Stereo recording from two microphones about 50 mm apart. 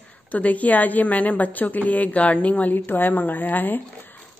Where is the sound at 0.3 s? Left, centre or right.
Left.